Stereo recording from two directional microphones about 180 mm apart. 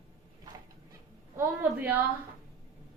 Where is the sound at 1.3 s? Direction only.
10° right (ahead or behind).